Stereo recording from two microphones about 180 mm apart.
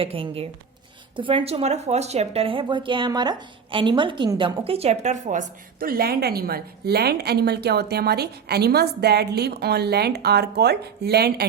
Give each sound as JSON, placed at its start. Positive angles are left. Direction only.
{"t": 0.0, "sound": "a woman's voice", "side_deg": -30}